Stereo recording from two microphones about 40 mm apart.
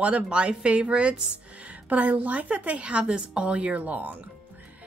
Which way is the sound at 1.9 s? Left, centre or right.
Right.